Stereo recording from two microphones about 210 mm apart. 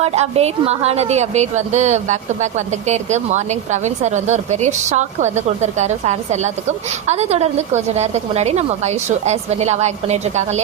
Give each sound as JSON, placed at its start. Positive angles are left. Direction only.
{"t": 0.0, "sound": "a woman's voice", "side_deg": -30}